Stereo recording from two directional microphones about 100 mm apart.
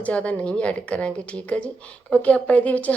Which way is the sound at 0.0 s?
15° left (ahead or behind).